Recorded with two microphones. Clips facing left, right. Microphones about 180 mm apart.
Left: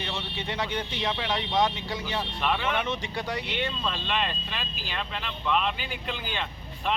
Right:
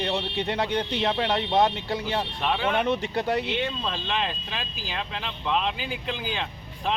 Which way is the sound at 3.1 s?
60° right (ahead or behind).